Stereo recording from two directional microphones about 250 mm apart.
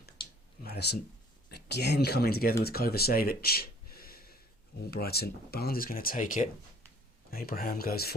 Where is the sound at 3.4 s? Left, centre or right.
Left.